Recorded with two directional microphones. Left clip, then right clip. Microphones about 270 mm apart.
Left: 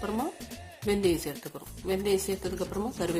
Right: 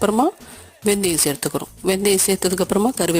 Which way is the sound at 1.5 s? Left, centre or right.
Right.